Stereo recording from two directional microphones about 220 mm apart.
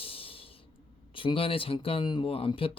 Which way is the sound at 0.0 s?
25° left (ahead or behind).